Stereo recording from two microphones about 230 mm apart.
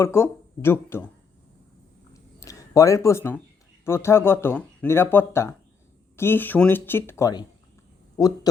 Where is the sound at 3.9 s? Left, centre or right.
Centre.